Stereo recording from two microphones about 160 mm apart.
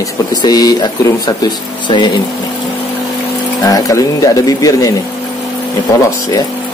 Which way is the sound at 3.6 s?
20° left (ahead or behind).